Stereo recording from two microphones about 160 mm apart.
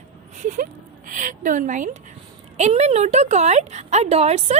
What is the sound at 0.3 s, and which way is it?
A woman's voice, 55° right (ahead or behind).